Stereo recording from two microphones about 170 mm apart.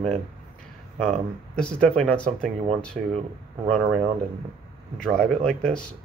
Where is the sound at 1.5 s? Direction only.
5° left (ahead or behind).